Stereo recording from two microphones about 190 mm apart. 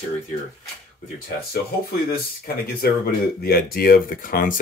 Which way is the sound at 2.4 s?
55° left (ahead or behind).